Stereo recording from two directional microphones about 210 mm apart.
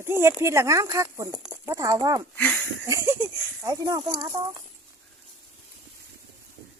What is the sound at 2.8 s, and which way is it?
Speech, 15° right (ahead or behind).